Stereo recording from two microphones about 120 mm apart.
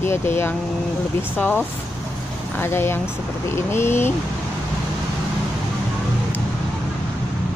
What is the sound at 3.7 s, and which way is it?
Speech, 20° left (ahead or behind).